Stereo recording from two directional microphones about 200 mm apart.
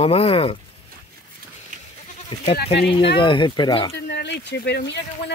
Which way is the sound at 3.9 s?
55° left (ahead or behind).